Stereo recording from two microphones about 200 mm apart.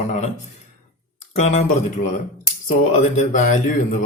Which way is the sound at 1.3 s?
35° left (ahead or behind).